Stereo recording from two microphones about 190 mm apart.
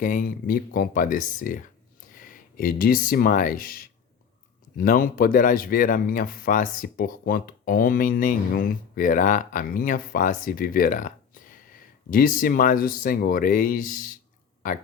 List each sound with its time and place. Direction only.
0.0 s speech: 45° left (ahead or behind)